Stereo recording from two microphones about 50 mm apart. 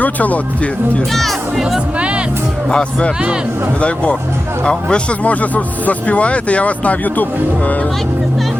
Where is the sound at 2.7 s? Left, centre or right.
Centre; by 7.7 s left.